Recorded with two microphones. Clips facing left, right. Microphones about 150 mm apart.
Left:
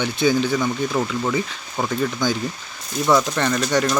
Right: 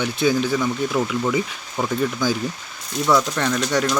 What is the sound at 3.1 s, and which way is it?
Speech, centre (ahead or behind).